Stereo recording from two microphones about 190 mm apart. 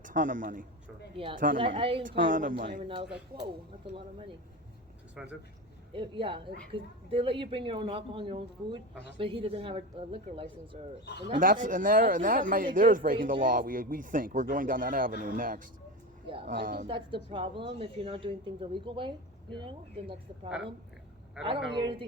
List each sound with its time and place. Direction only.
0.0 s a man's voice: 45° right (ahead or behind)
1.1 s a woman's voice: 30° right (ahead or behind)
2.0 s speech: 45° right (ahead or behind)
2.8 s a woman's voice: 25° right (ahead or behind)
5.1 s speech: 5° right (ahead or behind)
5.9 s a woman's voice: 30° right (ahead or behind)
11.3 s speech: 45° right (ahead or behind)
16.2 s speech: 30° right (ahead or behind)
16.5 s speech: 45° right (ahead or behind)
16.8 s a woman's voice: 25° right (ahead or behind)